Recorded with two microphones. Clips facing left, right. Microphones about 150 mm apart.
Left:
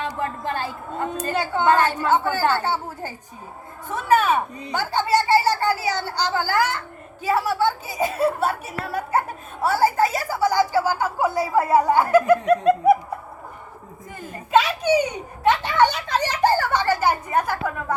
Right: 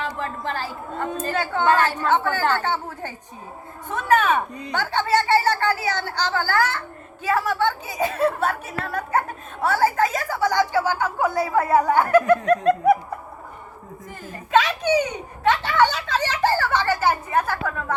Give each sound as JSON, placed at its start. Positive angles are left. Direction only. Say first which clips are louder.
{"t": 0.0, "sound": "a woman's voice", "louder": "left 1 dB", "side_deg": 20}
{"t": 14.5, "sound": "speech", "louder": "left 1 dB", "side_deg": 10}